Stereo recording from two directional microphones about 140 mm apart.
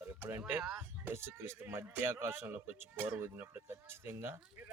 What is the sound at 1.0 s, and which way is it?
Speech, 20° right (ahead or behind).